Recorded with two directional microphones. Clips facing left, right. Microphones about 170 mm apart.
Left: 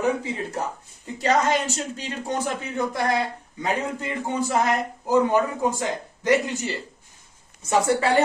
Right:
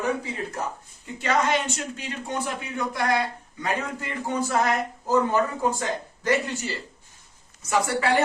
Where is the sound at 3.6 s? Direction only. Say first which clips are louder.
Left 3 dB; 20° left (ahead or behind).